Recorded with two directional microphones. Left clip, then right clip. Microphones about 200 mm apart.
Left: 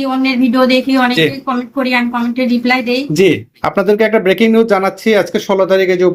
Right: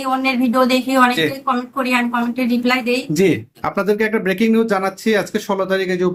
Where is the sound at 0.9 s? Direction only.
15° right (ahead or behind).